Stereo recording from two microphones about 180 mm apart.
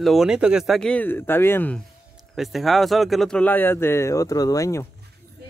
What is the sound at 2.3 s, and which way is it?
Speech, centre (ahead or behind).